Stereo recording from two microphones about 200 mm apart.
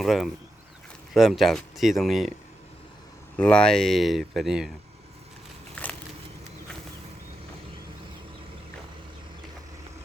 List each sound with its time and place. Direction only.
0.0 s speech: centre (ahead or behind)
3.3 s speech: 5° left (ahead or behind)
5.7 s a sound: 5° left (ahead or behind)